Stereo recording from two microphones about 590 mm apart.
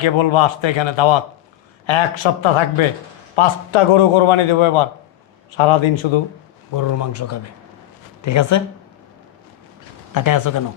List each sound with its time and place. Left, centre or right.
0.0 s a man's voice: left
6.7 s speech: left
10.2 s speech: left